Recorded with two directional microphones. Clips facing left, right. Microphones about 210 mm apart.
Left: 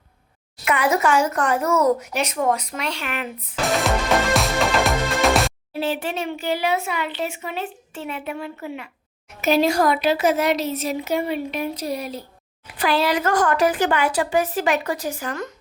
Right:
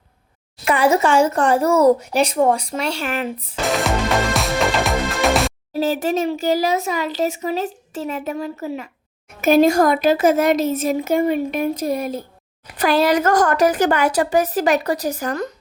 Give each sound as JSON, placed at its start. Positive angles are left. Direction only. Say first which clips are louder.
{"t": 0.6, "sound": "speech", "louder": "right 4 dB", "side_deg": -30}
{"t": 3.7, "sound": "music", "louder": "right 1 dB", "side_deg": 0}
{"t": 5.7, "sound": "speech", "louder": "right 6 dB", "side_deg": -40}
{"t": 9.4, "sound": "speech", "louder": "right 5 dB", "side_deg": -50}